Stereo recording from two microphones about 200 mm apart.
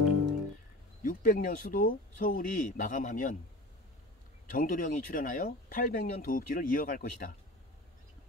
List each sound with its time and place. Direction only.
1.0 s speech: 45° left (ahead or behind)
4.5 s speech: 45° left (ahead or behind)